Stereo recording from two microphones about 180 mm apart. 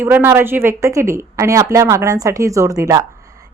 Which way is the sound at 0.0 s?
15° right (ahead or behind).